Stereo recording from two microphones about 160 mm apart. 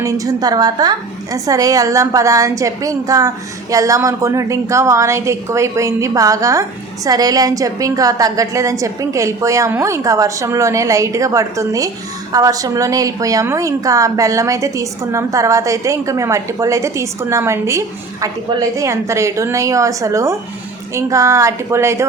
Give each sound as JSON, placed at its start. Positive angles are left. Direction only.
{"t": 0.0, "sound": "a woman's voice", "side_deg": -20}